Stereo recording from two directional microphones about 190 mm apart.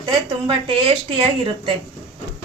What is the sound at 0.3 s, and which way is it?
Speech, 30° right (ahead or behind).